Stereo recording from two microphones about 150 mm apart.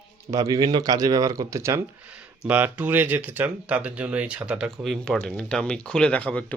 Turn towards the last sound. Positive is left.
turn(degrees=10)  # may be behind; listen again after turning